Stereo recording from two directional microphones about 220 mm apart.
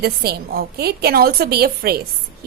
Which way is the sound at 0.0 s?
45° right (ahead or behind).